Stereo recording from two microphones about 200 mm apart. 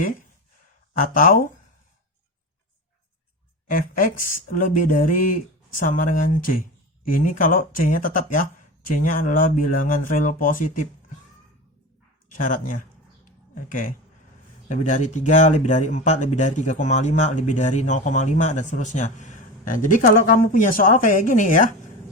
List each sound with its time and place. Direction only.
0.9 s speech: 45° left (ahead or behind)
3.7 s speech: 45° left (ahead or behind)
12.3 s speech: 40° left (ahead or behind)